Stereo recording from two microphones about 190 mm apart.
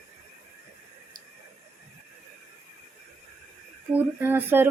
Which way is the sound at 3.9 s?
10° right (ahead or behind).